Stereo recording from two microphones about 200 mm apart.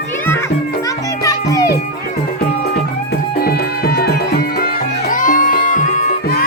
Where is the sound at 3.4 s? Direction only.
50° left (ahead or behind).